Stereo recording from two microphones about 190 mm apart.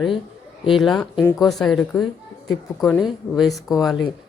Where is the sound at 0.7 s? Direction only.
Centre (ahead or behind).